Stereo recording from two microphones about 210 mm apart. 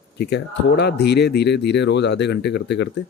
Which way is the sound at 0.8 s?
50° left (ahead or behind).